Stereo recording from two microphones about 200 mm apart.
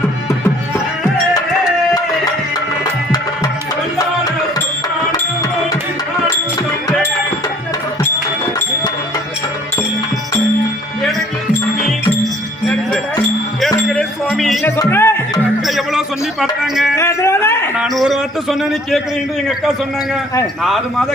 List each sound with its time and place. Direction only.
3.9 s music: 20° left (ahead or behind)
13.9 s music: centre (ahead or behind)
14.8 s music: 10° left (ahead or behind)
15.6 s music: centre (ahead or behind)
16.9 s a sound: 15° left (ahead or behind)
17.7 s a man's voice: centre (ahead or behind)
20.6 s a man's voice: centre (ahead or behind)